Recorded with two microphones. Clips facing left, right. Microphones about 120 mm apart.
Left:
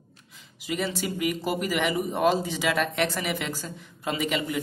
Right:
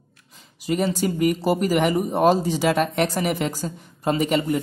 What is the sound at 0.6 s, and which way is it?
Speech, 40° right (ahead or behind).